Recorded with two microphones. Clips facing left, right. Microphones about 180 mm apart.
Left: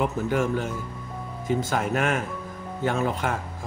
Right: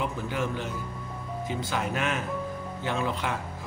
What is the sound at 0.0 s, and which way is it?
A man's voice, 45° left (ahead or behind).